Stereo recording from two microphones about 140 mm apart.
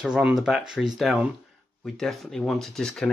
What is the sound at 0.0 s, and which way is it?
Speech, 5° right (ahead or behind).